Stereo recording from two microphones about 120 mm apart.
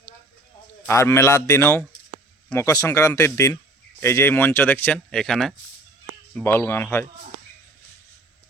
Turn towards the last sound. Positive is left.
turn(degrees=20)  # may be behind; listen again after turning